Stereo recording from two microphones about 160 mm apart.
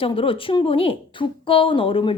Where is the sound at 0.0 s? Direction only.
35° left (ahead or behind).